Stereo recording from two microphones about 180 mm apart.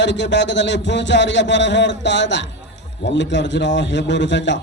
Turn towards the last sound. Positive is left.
turn(degrees=80)